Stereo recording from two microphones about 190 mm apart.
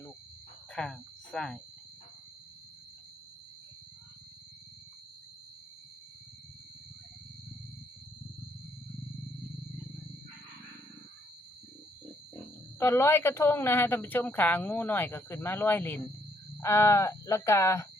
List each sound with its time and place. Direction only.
0.7 s speech: 5° left (ahead or behind)
12.8 s a woman's voice: 15° left (ahead or behind)